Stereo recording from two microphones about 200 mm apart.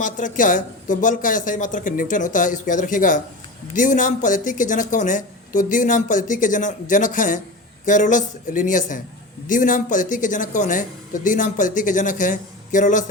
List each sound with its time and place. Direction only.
0.0 s speech: 40° left (ahead or behind)